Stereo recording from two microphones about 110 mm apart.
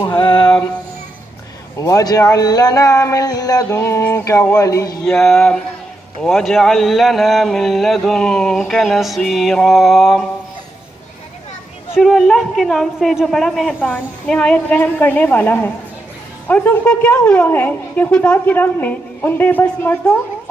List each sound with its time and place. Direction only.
0.0 s music: 45° left (ahead or behind)
1.8 s speech: 30° left (ahead or behind)
5.0 s speech: 5° left (ahead or behind)
11.9 s a woman's voice: centre (ahead or behind); by 20.2 s 15° left (ahead or behind)